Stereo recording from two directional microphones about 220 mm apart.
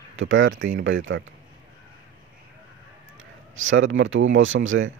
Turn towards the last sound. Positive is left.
turn(degrees=-60)  # may be behind; listen again after turning